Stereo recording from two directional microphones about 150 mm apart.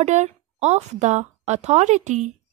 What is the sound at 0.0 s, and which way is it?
A woman's voice, 50° right (ahead or behind).